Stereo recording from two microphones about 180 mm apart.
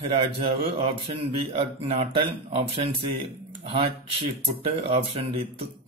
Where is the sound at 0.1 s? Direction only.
30° right (ahead or behind).